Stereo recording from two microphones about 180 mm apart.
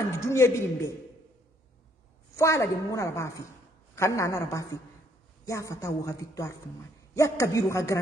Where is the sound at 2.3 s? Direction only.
15° left (ahead or behind).